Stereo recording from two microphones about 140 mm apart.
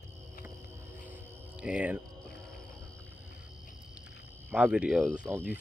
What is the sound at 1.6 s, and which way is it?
Speech, 10° right (ahead or behind).